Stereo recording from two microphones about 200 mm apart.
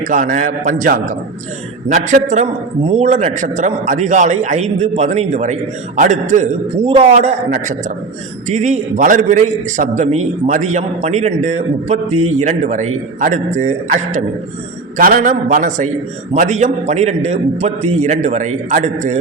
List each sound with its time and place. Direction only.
0.0 s a man's voice: 40° right (ahead or behind)
12.1 s a man's voice: 90° right
12.4 s a man's voice: 35° right (ahead or behind)